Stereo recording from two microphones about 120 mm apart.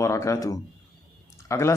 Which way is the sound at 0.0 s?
25° left (ahead or behind).